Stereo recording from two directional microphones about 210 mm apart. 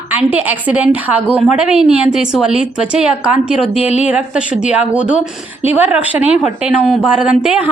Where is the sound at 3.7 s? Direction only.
30° left (ahead or behind).